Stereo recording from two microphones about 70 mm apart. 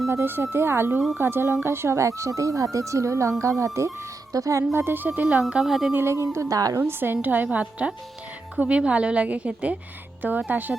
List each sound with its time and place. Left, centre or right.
0.1 s speech: right
0.9 s speech: centre
1.2 s speech: right
5.5 s a woman's voice: centre
5.9 s speech: right
6.7 s a woman's voice: right